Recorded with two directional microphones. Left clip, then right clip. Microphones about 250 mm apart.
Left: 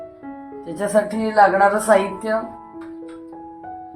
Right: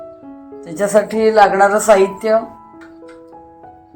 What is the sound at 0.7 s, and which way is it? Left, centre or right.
A woman's voice, right.